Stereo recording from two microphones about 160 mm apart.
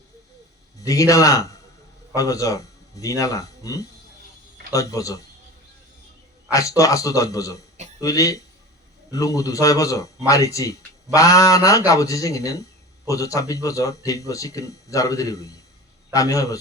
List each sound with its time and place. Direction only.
0.9 s a man's voice: 20° left (ahead or behind)
6.5 s a man's voice: 20° left (ahead or behind)